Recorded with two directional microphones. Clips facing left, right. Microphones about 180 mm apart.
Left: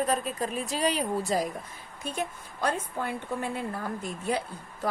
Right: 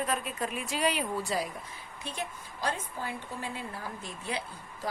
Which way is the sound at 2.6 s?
55° left (ahead or behind).